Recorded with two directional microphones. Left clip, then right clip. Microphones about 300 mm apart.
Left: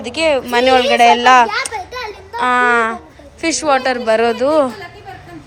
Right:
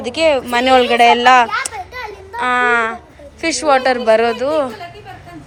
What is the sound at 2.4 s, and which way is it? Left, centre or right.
A woman's voice, centre.